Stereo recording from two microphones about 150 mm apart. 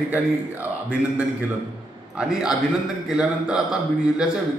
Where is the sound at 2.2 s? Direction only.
5° right (ahead or behind).